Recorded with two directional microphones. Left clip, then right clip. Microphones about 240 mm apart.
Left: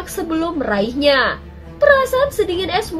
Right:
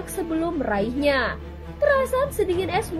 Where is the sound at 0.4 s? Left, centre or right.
Right.